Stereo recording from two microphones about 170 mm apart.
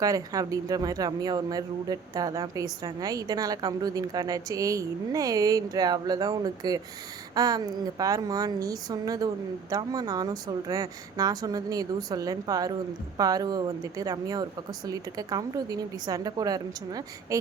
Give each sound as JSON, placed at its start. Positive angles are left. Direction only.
{"t": 0.0, "sound": "speech", "side_deg": -20}